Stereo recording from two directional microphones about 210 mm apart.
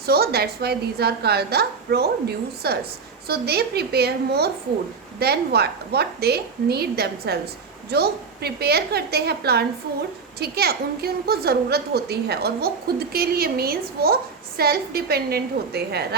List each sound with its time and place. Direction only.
0.0 s a woman's voice: 50° right (ahead or behind)